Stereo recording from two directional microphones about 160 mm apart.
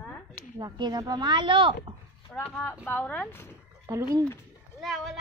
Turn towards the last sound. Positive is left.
turn(degrees=0)  # may be behind; listen again after turning